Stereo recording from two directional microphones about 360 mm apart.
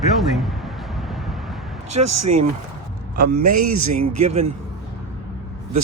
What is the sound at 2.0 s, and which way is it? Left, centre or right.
A man's voice, right.